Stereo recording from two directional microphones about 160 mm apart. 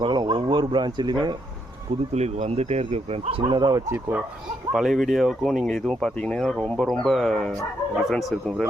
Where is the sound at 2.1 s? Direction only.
45° right (ahead or behind); by 4.2 s 15° right (ahead or behind).